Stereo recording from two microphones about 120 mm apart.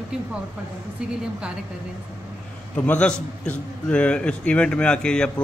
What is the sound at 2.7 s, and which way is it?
A man's voice, 10° left (ahead or behind).